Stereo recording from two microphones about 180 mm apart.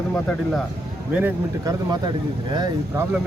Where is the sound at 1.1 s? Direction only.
10° right (ahead or behind).